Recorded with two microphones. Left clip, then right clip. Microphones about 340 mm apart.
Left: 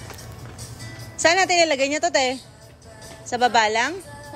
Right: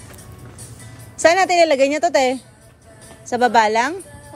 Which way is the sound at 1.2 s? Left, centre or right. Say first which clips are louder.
Right 4 dB; centre.